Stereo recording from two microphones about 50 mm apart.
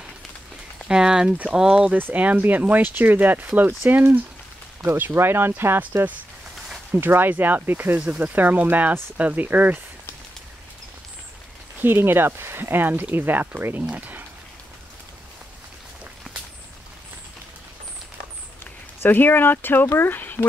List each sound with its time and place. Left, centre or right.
0.8 s speech: centre
2.1 s speech: right
5.9 s speech: right
6.9 s speech: right
11.8 s speech: right
13.9 s a sound: right
18.6 s speech: left